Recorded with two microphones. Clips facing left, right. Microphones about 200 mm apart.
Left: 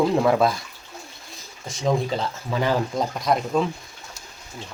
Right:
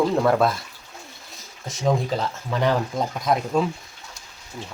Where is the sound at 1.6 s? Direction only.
Centre (ahead or behind).